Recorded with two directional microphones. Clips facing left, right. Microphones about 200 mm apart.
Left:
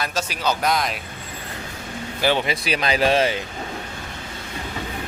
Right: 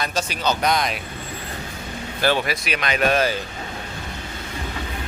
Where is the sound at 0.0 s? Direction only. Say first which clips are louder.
Right 1 dB; 5° left (ahead or behind).